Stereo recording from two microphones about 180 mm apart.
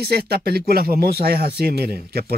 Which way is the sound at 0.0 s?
60° right (ahead or behind).